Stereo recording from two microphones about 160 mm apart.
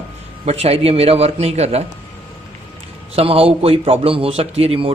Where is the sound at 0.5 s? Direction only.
40° right (ahead or behind).